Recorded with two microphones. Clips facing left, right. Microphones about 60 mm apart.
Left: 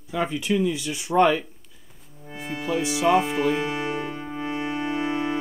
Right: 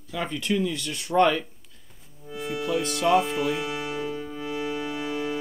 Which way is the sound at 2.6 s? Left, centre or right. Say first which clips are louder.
Left 3 dB; centre.